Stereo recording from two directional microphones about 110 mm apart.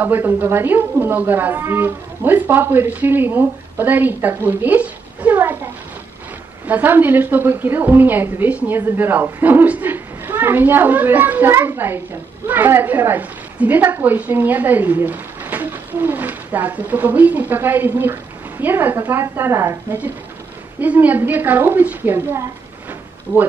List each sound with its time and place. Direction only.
0.0 s a woman's voice: 20° right (ahead or behind)
6.7 s a woman's voice: 15° right (ahead or behind)